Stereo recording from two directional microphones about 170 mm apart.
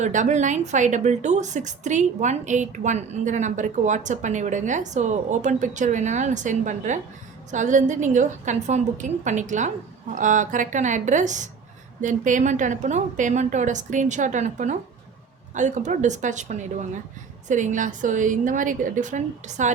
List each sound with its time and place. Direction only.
0.0 s a woman's voice: 45° right (ahead or behind)